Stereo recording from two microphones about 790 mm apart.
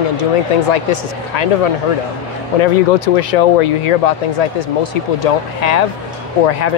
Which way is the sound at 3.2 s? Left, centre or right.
Left.